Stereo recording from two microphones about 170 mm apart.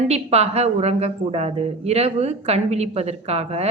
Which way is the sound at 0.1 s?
40° right (ahead or behind).